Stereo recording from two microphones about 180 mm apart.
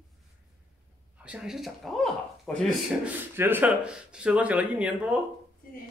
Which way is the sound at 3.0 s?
10° right (ahead or behind).